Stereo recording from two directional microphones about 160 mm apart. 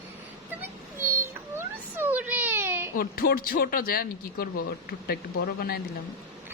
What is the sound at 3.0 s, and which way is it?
Speech, 70° left (ahead or behind).